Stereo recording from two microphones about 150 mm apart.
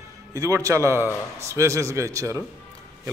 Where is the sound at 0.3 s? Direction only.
20° right (ahead or behind).